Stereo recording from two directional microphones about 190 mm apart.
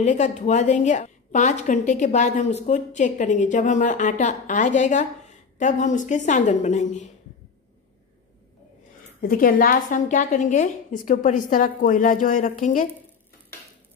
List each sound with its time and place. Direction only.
0.0 s a woman's voice: 40° left (ahead or behind)
9.2 s a woman's voice: 50° left (ahead or behind)